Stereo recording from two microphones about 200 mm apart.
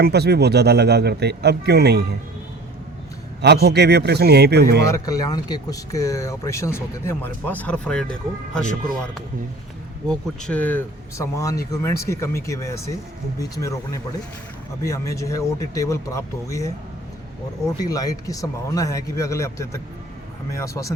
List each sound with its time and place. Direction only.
0.0 s speech: 55° right (ahead or behind)
3.4 s speech: 55° right (ahead or behind)
4.9 s speech: 15° left (ahead or behind)
10.1 s speech: 5° left (ahead or behind)
17.7 s speech: 20° left (ahead or behind)